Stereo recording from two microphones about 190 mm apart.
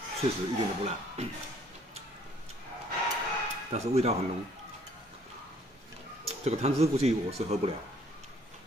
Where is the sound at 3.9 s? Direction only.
35° right (ahead or behind).